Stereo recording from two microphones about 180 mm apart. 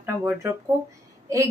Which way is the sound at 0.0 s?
15° right (ahead or behind).